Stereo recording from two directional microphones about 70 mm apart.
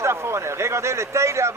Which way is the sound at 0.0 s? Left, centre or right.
Right.